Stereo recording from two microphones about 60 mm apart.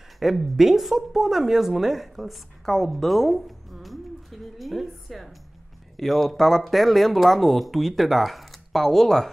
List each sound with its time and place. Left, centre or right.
0.2 s a woman's voice: centre